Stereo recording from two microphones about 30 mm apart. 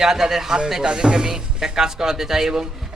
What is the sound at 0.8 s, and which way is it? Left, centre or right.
A man's voice, right.